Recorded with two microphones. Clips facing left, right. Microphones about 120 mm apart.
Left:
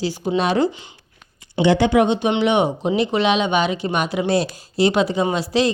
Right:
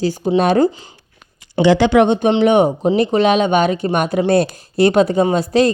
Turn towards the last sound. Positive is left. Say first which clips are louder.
# right 5 dB
turn(degrees=-45)  # may be behind; listen again after turning